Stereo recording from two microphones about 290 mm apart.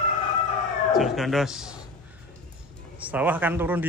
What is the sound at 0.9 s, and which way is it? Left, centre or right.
Speech, centre.